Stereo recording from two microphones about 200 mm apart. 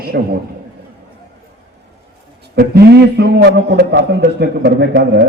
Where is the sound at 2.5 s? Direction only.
55° right (ahead or behind).